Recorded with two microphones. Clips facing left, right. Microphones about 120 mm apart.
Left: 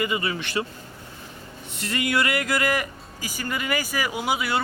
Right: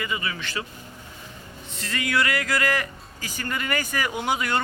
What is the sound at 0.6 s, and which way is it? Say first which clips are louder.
Speech: left 8 dB; 30° left (ahead or behind).